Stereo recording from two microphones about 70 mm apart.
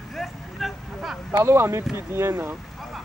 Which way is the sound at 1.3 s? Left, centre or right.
Right.